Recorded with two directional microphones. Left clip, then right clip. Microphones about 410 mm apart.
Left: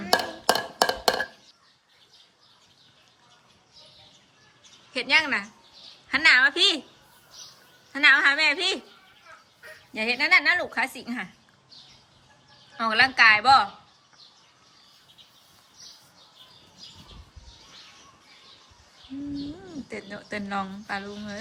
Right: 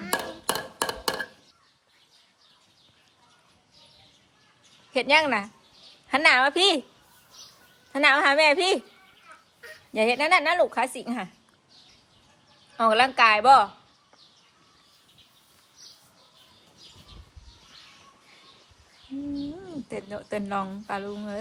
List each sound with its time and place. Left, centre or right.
0.1 s a sound: centre
4.9 s a woman's voice: centre
7.9 s a woman's voice: centre
9.9 s a woman's voice: centre
12.7 s a woman's voice: centre
19.9 s speech: centre